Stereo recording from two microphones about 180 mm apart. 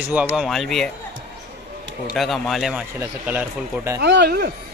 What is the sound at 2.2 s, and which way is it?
A man's voice, centre (ahead or behind).